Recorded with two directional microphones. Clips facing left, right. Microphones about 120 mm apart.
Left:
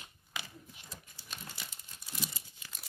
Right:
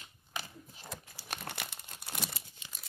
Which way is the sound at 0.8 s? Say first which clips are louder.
Right 6 dB; 70° right (ahead or behind).